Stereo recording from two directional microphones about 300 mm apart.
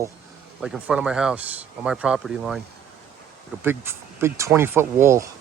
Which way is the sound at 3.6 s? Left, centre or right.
Centre.